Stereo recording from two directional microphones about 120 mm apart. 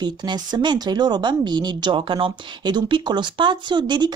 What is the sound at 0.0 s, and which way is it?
Speech, 35° right (ahead or behind).